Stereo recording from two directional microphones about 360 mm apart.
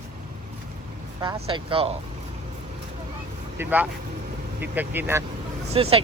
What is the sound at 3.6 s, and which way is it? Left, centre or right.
Speech, centre.